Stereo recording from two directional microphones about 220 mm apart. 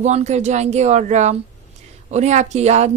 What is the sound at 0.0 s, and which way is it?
A woman's voice, 30° right (ahead or behind).